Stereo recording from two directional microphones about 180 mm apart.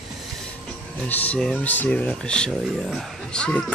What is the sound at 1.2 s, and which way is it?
Speech, 5° left (ahead or behind).